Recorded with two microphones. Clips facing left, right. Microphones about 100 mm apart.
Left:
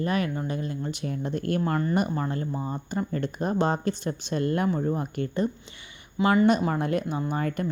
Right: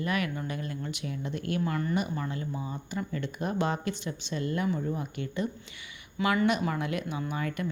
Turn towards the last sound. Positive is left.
turn(degrees=40)  # may be behind; listen again after turning